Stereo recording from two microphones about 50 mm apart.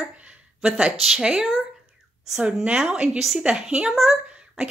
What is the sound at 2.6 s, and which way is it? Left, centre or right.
Speech, centre.